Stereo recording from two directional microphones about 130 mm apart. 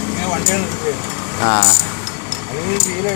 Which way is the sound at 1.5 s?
45° left (ahead or behind).